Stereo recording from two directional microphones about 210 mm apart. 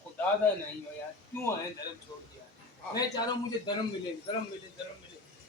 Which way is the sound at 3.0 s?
20° left (ahead or behind).